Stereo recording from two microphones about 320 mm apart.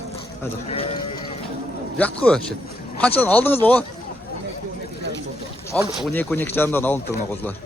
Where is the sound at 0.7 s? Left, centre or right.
Centre.